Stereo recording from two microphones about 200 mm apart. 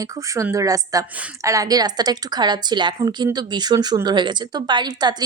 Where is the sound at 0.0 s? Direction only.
15° right (ahead or behind).